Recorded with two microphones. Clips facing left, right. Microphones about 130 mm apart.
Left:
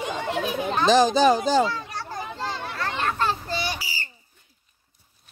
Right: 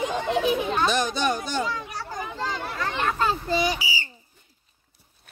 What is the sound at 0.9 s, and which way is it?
Speech, 90° left.